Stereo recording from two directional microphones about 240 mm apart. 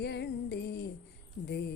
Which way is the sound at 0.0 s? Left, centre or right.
Left.